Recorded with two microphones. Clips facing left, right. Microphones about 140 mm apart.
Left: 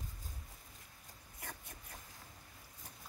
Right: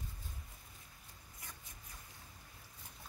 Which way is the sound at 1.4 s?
60° left (ahead or behind).